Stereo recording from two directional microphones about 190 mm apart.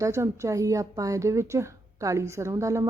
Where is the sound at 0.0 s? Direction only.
15° right (ahead or behind).